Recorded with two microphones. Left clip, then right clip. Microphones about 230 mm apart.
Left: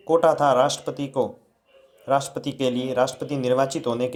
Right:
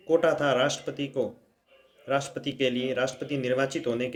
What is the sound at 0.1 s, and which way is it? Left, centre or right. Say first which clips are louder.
Speech: left 5 dB; centre.